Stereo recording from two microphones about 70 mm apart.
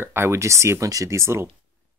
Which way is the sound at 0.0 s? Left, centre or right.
Right.